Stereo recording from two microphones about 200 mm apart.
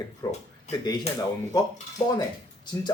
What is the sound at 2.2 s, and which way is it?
Speech, 20° left (ahead or behind).